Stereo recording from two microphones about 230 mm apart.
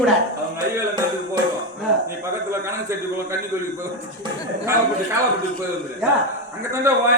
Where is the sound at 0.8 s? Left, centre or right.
Centre.